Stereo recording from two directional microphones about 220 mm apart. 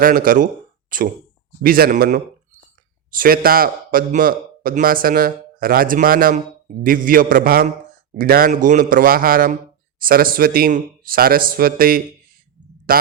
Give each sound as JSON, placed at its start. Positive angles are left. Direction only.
{"t": 0.0, "sound": "speech", "side_deg": -40}